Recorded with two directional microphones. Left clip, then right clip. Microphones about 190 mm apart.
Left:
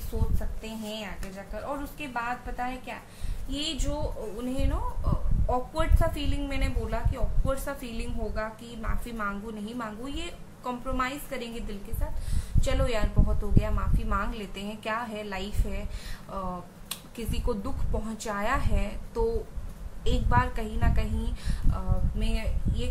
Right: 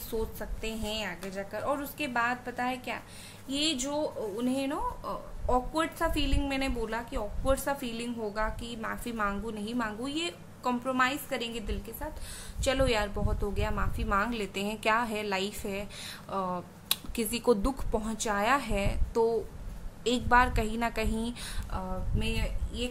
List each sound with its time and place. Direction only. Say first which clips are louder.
0.6 s a woman's voice: right 3 dB; 50° right (ahead or behind)
21.7 s speech: right 2 dB; 35° right (ahead or behind)